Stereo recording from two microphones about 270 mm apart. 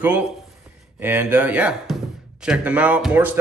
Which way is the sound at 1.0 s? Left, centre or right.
Centre.